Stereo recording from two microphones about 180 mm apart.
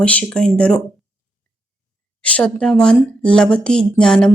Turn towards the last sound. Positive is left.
turn(degrees=5)  # may be behind; listen again after turning